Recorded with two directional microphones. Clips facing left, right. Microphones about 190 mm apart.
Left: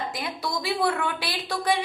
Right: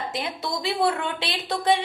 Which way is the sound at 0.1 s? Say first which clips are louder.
Right 1 dB; 25° right (ahead or behind).